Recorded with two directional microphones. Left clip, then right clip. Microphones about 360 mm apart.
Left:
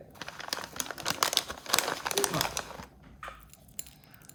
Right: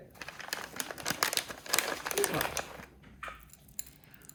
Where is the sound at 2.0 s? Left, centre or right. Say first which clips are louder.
Left 2 dB; left.